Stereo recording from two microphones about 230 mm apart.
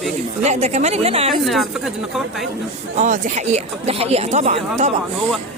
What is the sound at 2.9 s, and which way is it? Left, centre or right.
Speech, right.